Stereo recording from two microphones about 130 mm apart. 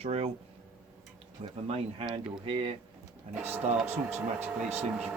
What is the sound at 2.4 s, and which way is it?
Speech, 45° right (ahead or behind).